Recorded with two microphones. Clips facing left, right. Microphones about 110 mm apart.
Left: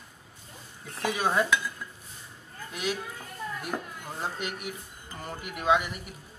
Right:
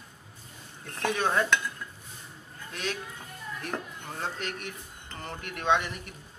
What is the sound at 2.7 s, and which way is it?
Speech, 10° left (ahead or behind).